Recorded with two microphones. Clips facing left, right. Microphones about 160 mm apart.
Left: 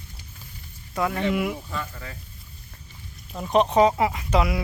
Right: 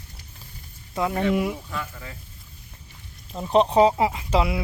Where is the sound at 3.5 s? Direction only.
30° right (ahead or behind).